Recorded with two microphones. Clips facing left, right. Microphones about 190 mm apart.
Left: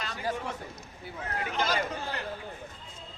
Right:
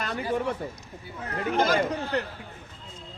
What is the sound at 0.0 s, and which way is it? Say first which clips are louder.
Speech: right 6 dB; 60° right (ahead or behind).